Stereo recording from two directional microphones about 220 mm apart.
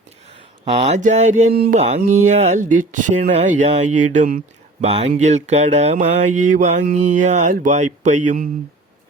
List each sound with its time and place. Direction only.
0.6 s speech: 30° right (ahead or behind)
1.5 s mantra: 45° right (ahead or behind)
2.2 s speech: 30° right (ahead or behind)